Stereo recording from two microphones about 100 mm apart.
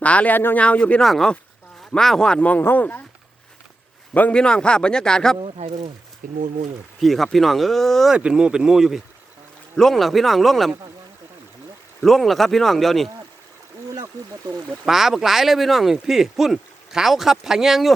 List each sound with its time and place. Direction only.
0.0 s speech: 15° left (ahead or behind)
4.1 s speech: 15° left (ahead or behind)
5.4 s speech: 80° right
7.0 s speech: centre (ahead or behind)
8.1 s speech: 10° right (ahead or behind)
12.0 s speech: centre (ahead or behind)
13.9 s speech: 35° right (ahead or behind)
14.8 s speech: 5° right (ahead or behind)